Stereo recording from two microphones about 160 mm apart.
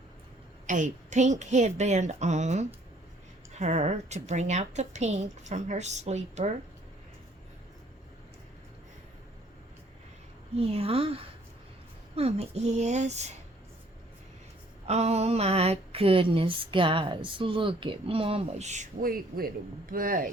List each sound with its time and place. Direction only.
0.7 s a woman's voice: 50° right (ahead or behind)
10.6 s a woman's voice: 40° right (ahead or behind)
14.8 s a woman's voice: 40° right (ahead or behind); by 20.3 s 60° right (ahead or behind)